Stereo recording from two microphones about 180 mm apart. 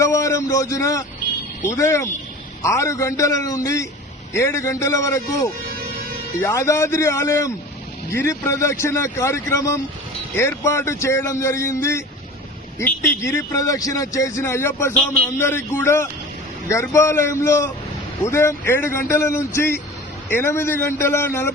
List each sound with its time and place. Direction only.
0.0 s a man's voice: 15° left (ahead or behind)